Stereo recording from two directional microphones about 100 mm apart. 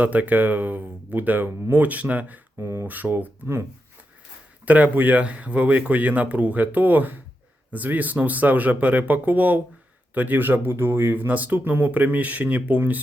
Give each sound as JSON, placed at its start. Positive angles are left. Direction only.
{"t": 0.0, "sound": "speech", "side_deg": -15}
{"t": 2.6, "sound": "speech", "side_deg": -25}
{"t": 2.8, "sound": "speech", "side_deg": -15}
{"t": 4.6, "sound": "speech", "side_deg": -15}